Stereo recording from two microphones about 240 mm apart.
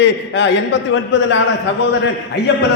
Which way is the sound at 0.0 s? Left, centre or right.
Left.